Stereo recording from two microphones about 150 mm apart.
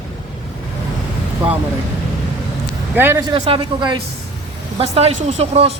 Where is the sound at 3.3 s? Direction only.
35° right (ahead or behind).